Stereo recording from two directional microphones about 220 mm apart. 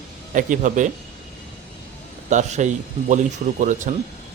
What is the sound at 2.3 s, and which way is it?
Speech, 30° right (ahead or behind).